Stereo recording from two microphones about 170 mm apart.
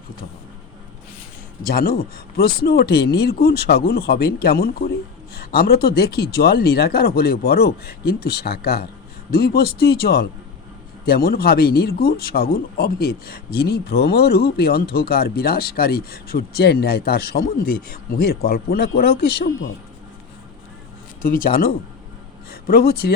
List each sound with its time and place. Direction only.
1.6 s speech: 60° left (ahead or behind)
21.2 s speech: 55° left (ahead or behind)